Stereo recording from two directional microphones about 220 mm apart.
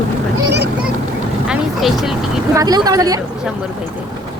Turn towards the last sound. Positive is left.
turn(degrees=-15)  # may be behind; listen again after turning